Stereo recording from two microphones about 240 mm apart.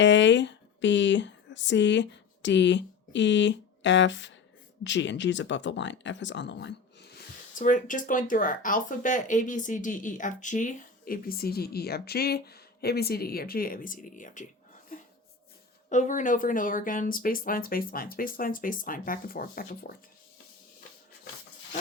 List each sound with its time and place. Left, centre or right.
0.0 s speech: left
7.6 s speech: left
15.9 s speech: left